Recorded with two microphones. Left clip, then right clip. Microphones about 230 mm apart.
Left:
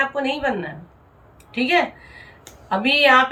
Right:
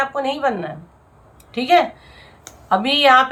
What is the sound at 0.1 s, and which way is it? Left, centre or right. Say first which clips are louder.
A woman's voice: right 2 dB; centre.